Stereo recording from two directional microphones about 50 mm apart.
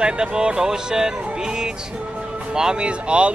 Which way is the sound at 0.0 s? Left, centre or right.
Centre.